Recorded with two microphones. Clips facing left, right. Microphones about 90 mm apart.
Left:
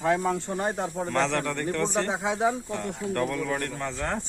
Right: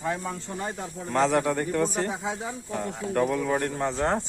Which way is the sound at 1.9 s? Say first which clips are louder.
Left 3 dB; 90° left.